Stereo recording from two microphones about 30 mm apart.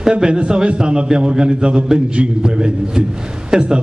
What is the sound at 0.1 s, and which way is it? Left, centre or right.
A man's voice, right.